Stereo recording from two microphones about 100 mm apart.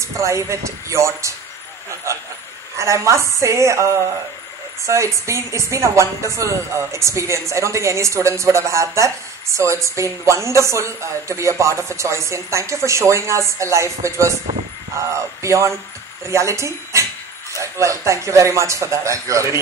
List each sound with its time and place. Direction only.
0.0 s speech: 30° right (ahead or behind)